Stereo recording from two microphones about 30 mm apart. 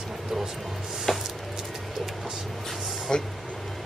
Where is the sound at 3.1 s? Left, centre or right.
Left.